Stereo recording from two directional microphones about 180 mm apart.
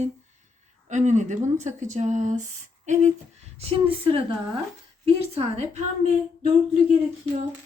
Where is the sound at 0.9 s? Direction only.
40° right (ahead or behind).